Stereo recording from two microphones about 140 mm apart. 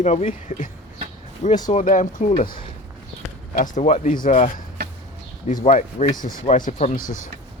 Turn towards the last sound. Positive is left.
turn(degrees=70)  # may be behind; listen again after turning